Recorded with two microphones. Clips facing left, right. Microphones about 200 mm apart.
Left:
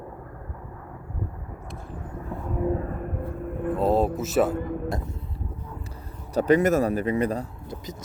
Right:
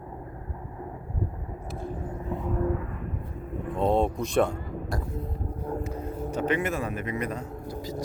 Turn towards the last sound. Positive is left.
turn(degrees=20)  # may be behind; listen again after turning